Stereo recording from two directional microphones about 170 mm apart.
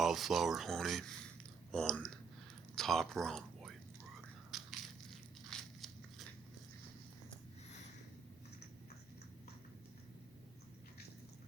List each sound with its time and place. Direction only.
0.0 s speech: centre (ahead or behind)
4.5 s crushing: centre (ahead or behind)
5.5 s biting: centre (ahead or behind)